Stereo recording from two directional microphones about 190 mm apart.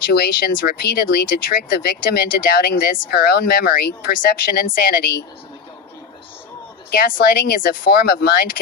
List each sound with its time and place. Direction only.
0.1 s speech: 55° left (ahead or behind)
6.9 s speech: 55° left (ahead or behind)